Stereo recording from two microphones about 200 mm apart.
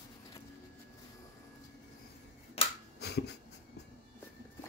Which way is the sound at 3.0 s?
55° left (ahead or behind).